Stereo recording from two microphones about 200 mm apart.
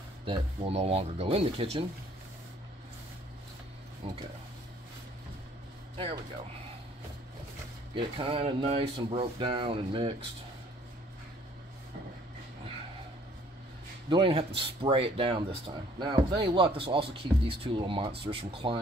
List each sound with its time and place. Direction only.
0.2 s speech: 25° right (ahead or behind)
4.0 s speech: 25° right (ahead or behind)
7.9 s speech: 25° right (ahead or behind)
14.0 s speech: 25° right (ahead or behind)